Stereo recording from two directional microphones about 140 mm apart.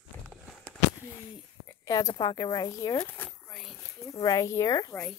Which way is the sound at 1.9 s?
25° left (ahead or behind).